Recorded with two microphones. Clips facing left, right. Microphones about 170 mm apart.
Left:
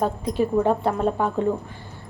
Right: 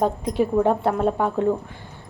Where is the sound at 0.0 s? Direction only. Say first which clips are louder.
Right 1 dB; 15° right (ahead or behind).